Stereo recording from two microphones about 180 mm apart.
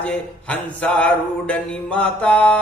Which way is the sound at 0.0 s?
5° left (ahead or behind).